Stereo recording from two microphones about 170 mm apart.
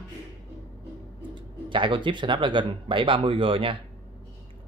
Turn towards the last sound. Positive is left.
turn(degrees=-30)  # may be behind; listen again after turning